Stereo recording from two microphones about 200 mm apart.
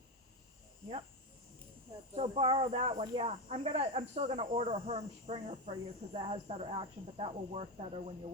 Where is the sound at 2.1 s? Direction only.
25° right (ahead or behind).